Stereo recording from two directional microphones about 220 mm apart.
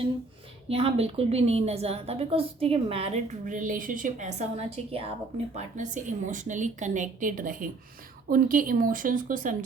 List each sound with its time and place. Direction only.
0.7 s a woman's voice: 25° right (ahead or behind)